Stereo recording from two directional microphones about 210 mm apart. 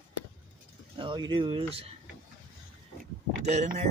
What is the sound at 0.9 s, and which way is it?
Speech, 25° right (ahead or behind).